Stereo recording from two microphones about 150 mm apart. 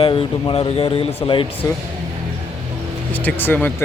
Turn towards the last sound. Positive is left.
turn(degrees=15)  # may be behind; listen again after turning